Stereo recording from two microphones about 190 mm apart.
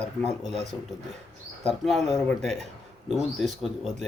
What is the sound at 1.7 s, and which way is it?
Speech, centre (ahead or behind).